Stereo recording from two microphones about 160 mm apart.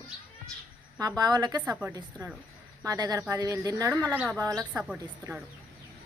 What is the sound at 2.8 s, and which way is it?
Speech, 20° right (ahead or behind).